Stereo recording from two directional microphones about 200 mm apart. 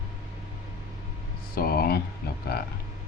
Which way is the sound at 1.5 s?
45° left (ahead or behind).